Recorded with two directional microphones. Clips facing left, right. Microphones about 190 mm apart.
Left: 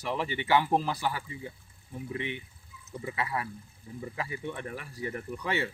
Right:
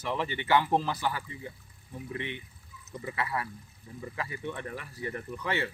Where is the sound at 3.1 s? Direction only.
15° left (ahead or behind).